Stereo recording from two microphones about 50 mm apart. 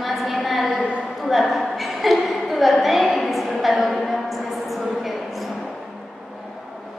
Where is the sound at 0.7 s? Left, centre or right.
Right.